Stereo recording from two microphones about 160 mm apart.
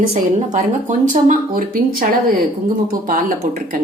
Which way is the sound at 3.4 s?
50° right (ahead or behind).